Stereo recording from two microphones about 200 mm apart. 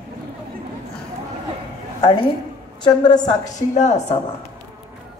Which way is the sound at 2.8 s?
20° left (ahead or behind).